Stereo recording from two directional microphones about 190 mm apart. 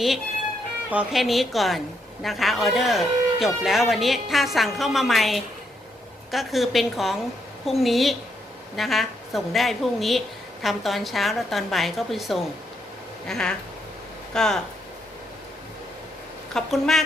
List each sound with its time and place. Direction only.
0.9 s a woman's voice: 5° right (ahead or behind)
16.6 s a woman's voice: centre (ahead or behind)